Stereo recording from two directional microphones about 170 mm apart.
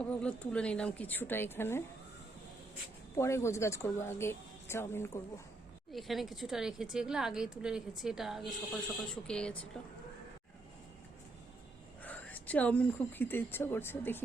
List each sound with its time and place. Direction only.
0.0 s a woman's voice: 5° left (ahead or behind)
3.2 s a woman's voice: 15° left (ahead or behind)
5.9 s a woman's voice: centre (ahead or behind)
12.0 s a woman's voice: 10° left (ahead or behind)